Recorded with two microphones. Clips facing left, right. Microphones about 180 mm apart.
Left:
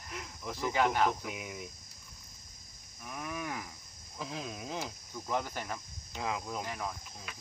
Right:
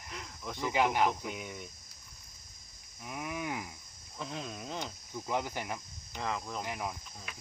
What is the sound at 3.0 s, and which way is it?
Speech, 15° right (ahead or behind).